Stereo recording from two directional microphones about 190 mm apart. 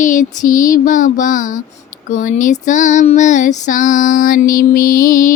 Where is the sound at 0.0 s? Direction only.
40° left (ahead or behind).